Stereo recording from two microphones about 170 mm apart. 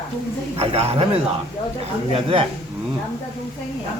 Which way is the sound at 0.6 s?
35° right (ahead or behind).